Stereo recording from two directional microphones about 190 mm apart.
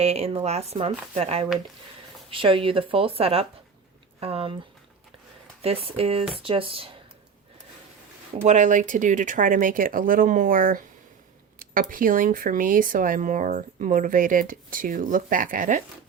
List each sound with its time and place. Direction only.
0.0 s a woman's voice: 35° right (ahead or behind)
5.6 s a woman's voice: 30° right (ahead or behind)
8.4 s speech: 40° right (ahead or behind)